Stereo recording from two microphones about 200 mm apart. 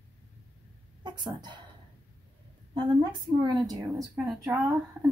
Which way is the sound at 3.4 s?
20° right (ahead or behind).